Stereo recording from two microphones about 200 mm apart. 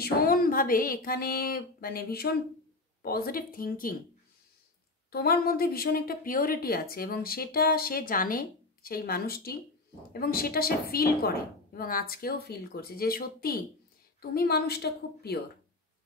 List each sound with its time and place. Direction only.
0.0 s a woman's voice: 45° left (ahead or behind)
5.1 s a woman's voice: 50° left (ahead or behind)